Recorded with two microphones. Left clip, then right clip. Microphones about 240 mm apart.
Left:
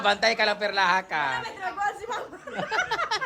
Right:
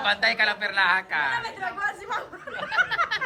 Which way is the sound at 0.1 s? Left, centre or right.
Left.